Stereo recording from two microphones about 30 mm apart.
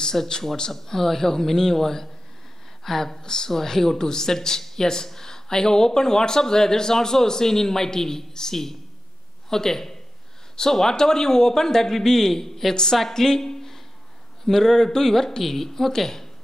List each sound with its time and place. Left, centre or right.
0.1 s a man's voice: centre
3.1 s a man's voice: left